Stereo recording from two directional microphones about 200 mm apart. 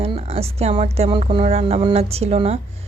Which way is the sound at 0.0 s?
30° right (ahead or behind).